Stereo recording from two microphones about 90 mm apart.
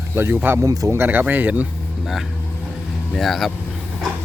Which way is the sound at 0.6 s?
40° right (ahead or behind).